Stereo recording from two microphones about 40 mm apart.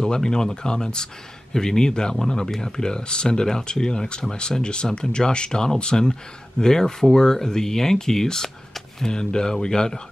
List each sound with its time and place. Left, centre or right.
0.0 s speech: centre